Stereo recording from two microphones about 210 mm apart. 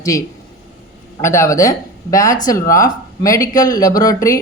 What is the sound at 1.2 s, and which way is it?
A woman's voice, 15° left (ahead or behind).